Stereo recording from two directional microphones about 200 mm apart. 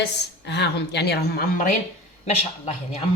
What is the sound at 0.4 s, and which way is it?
A woman's voice, 55° left (ahead or behind).